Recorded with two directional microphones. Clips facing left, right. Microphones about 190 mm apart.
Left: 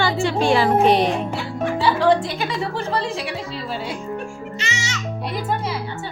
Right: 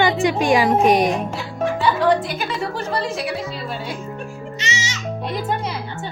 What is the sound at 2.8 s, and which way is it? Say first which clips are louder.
Speech: even; 30° left (ahead or behind).